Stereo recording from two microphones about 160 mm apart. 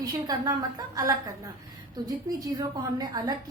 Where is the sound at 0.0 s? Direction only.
25° right (ahead or behind).